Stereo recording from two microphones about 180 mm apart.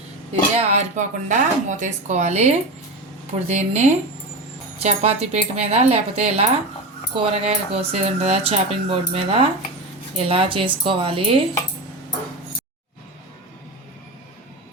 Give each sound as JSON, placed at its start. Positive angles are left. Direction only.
{"t": 0.5, "sound": "speech", "side_deg": -40}